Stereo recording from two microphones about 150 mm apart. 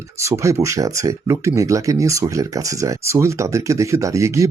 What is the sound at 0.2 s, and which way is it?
Speech, 20° right (ahead or behind).